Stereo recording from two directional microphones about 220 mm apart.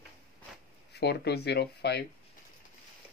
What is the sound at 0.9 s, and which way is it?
Speech, 50° left (ahead or behind).